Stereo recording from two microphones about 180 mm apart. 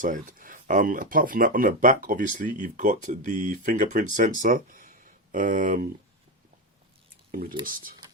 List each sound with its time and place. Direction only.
0.0 s speech: 45° right (ahead or behind)
7.6 s speech: 50° right (ahead or behind)